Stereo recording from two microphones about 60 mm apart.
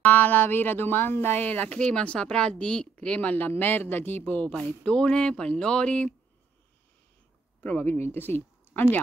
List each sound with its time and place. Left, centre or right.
0.0 s speech: left
1.8 s speech: centre
3.2 s speech: left
7.6 s speech: left